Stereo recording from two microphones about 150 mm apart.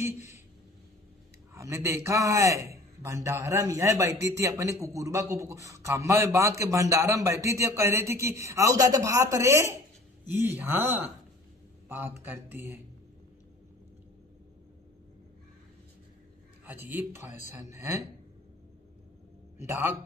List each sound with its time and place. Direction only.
1.5 s a man's voice: 20° right (ahead or behind)
12.2 s speech: 15° right (ahead or behind)
16.6 s a man's voice: 15° right (ahead or behind)
19.6 s speech: 20° right (ahead or behind)